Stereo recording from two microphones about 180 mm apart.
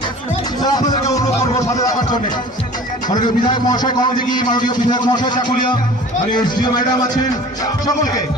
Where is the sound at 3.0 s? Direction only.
25° left (ahead or behind).